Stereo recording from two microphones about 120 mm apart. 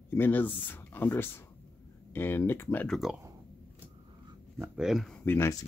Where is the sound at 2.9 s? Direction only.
Centre (ahead or behind).